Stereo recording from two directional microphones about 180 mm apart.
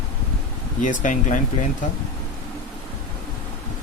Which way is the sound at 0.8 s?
45° left (ahead or behind).